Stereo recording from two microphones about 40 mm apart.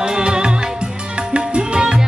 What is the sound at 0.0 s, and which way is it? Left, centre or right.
Music, right.